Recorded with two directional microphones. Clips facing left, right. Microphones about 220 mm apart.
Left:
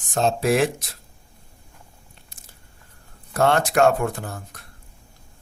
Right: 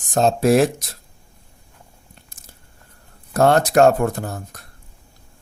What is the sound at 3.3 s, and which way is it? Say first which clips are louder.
Speech: right 4 dB; 40° right (ahead or behind).